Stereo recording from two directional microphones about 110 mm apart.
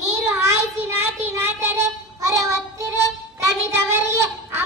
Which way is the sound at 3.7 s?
25° right (ahead or behind).